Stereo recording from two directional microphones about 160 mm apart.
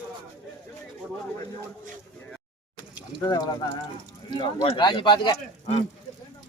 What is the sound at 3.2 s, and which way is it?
Speech, 25° left (ahead or behind).